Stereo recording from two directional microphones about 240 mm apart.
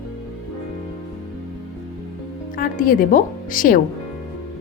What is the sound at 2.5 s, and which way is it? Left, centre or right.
Speech, left.